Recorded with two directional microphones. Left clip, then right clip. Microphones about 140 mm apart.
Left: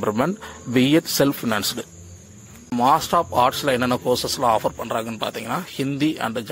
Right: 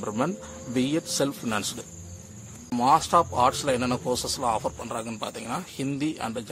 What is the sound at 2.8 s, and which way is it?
Speech, 25° left (ahead or behind).